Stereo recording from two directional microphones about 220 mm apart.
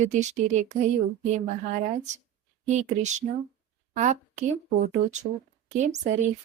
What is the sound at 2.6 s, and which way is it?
Speech, 35° right (ahead or behind).